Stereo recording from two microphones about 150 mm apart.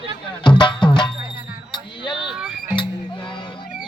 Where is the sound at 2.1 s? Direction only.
5° right (ahead or behind).